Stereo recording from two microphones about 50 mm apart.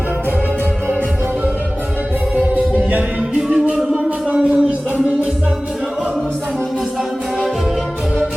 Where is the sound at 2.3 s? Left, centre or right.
Right.